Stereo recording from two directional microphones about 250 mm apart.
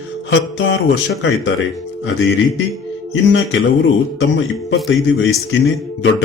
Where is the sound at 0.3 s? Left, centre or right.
Left.